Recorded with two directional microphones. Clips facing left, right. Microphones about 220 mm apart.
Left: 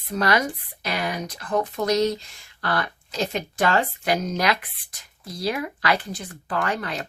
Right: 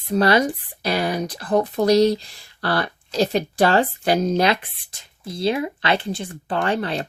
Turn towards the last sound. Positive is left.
turn(degrees=-30)  # may be behind; listen again after turning